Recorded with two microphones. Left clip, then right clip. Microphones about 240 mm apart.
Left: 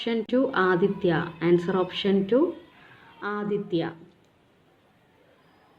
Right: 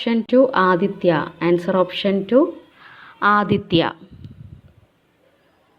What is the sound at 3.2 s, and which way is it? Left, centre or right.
A woman's voice, right.